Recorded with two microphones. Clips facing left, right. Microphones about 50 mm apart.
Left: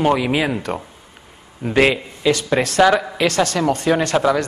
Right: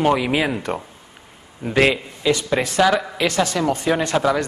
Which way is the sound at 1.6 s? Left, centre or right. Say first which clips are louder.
Left 2 dB; centre.